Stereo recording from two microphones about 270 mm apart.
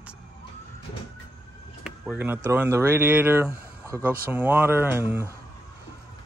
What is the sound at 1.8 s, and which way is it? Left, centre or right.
Speech, centre.